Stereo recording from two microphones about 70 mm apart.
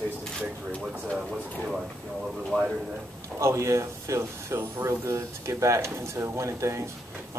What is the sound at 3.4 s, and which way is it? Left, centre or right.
Speech, right.